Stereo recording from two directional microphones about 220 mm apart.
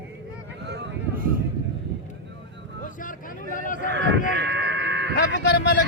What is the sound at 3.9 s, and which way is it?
Sheep, 55° right (ahead or behind).